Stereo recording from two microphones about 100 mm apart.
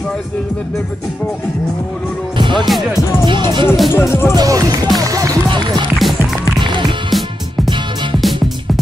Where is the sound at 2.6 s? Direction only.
Centre (ahead or behind).